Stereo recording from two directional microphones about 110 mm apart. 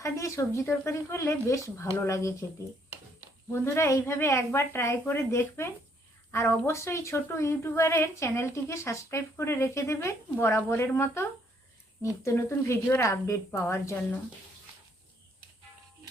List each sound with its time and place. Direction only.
0.0 s a woman's voice: 30° left (ahead or behind)
3.5 s a woman's voice: 25° left (ahead or behind)